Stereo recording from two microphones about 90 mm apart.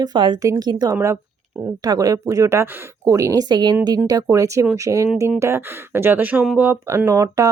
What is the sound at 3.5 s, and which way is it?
Speech, 50° right (ahead or behind).